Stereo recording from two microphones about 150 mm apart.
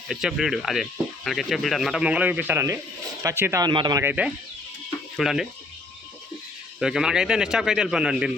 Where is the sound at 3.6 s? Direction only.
30° right (ahead or behind).